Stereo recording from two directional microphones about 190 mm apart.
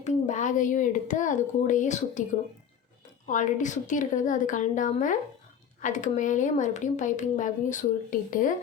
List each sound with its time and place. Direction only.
0.0 s speech: 40° left (ahead or behind)
3.2 s speech: 40° left (ahead or behind)